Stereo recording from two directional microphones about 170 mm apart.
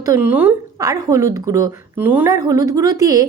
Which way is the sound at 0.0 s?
15° right (ahead or behind).